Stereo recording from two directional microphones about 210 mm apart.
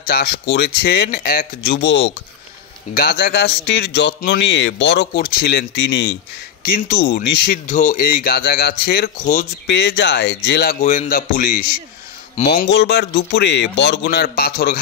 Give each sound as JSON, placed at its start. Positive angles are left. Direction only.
{"t": 0.0, "sound": "a man's voice", "side_deg": 50}
{"t": 7.6, "sound": "speech", "side_deg": 35}
{"t": 9.7, "sound": "speech", "side_deg": 55}
{"t": 12.6, "sound": "a man's voice", "side_deg": 55}